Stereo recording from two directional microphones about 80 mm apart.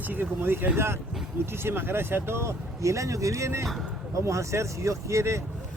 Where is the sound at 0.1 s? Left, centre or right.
Right.